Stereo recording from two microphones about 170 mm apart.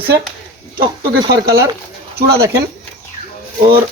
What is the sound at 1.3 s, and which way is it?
Speech, 65° right (ahead or behind).